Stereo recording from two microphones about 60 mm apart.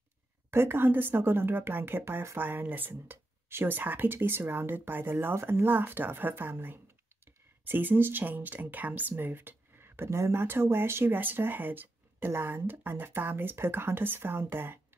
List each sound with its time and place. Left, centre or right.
0.5 s speech: right
10.4 s speech: right